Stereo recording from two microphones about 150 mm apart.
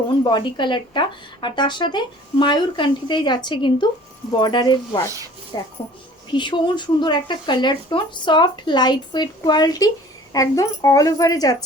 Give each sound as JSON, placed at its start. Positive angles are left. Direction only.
{"t": 0.3, "sound": "a woman's voice", "side_deg": 30}
{"t": 5.0, "sound": "speech", "side_deg": -20}
{"t": 5.5, "sound": "a woman's voice", "side_deg": 25}